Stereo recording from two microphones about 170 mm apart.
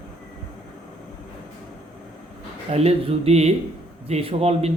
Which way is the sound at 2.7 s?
35° right (ahead or behind).